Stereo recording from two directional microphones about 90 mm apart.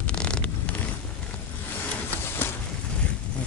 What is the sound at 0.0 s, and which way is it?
Vehicle, 10° left (ahead or behind).